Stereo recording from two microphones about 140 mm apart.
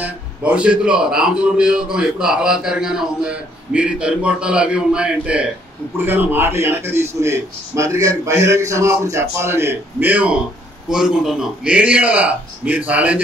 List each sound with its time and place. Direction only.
0.0 s a man's voice: 10° right (ahead or behind)